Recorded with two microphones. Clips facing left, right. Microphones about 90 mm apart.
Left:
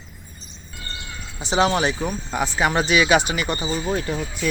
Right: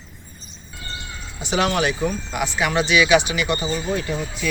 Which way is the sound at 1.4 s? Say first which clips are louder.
Left 1 dB; 30° left (ahead or behind).